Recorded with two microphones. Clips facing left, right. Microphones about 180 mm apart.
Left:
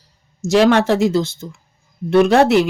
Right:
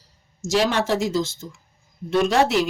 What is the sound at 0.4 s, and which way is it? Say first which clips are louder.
Speech: left 8 dB; 60° left (ahead or behind).